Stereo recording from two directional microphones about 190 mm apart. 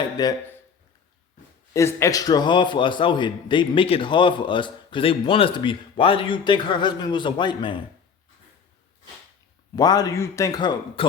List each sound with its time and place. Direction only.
0.2 s a man's voice: 20° left (ahead or behind)
1.7 s a man's voice: 15° left (ahead or behind)
9.7 s a man's voice: 20° left (ahead or behind)